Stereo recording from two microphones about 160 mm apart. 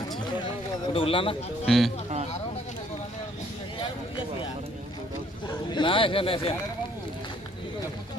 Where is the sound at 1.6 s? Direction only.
Centre (ahead or behind).